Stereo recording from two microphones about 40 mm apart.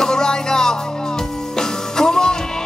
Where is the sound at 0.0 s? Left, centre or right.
Centre.